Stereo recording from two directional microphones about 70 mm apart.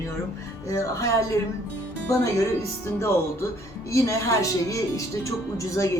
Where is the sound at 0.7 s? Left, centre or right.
Left.